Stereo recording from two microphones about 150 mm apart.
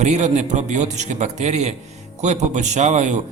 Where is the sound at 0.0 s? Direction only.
50° right (ahead or behind).